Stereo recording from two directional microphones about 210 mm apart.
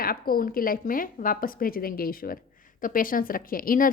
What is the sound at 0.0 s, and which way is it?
A woman's voice, 45° left (ahead or behind).